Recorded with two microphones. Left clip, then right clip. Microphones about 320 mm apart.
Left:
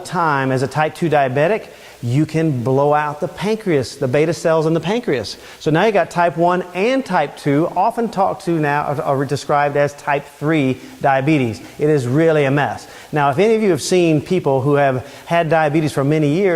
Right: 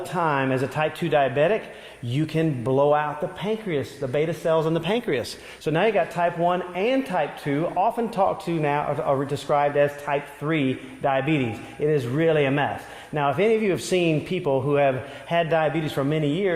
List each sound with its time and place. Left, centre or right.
0.1 s a man's voice: left
5.7 s a man's voice: left